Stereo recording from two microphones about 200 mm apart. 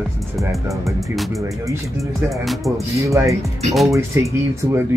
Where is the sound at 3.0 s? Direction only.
15° right (ahead or behind).